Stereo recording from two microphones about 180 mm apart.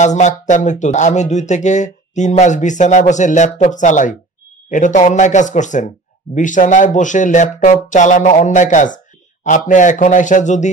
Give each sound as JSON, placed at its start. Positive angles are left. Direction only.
{"t": 0.0, "sound": "speech", "side_deg": 40}